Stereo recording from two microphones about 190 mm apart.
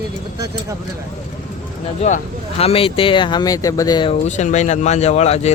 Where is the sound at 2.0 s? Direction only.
35° left (ahead or behind).